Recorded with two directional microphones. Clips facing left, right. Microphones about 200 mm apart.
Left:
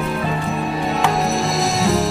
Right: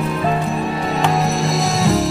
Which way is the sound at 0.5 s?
Centre (ahead or behind).